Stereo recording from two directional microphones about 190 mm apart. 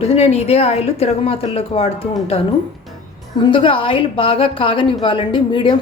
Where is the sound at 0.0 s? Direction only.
35° left (ahead or behind).